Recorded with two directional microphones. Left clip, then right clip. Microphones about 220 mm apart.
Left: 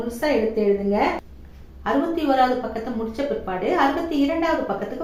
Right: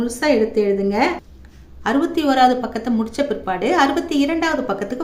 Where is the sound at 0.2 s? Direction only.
55° right (ahead or behind).